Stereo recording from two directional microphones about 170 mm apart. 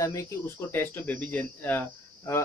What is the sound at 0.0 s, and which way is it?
Speech, 20° left (ahead or behind).